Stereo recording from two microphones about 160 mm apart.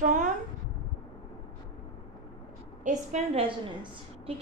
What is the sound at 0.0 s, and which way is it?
Speech, 50° right (ahead or behind).